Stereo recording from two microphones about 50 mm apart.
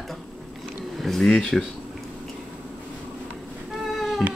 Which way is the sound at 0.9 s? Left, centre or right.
Centre.